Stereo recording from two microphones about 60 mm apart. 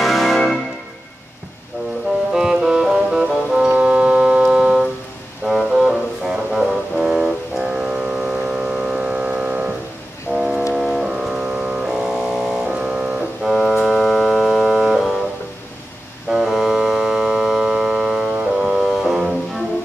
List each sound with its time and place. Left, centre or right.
0.0 s organ: centre
2.3 s music: centre
3.6 s organ: centre
5.4 s music: centre
10.3 s a sound: centre
10.7 s music: centre
13.4 s organ: centre
16.3 s a sound: centre
18.4 s music: centre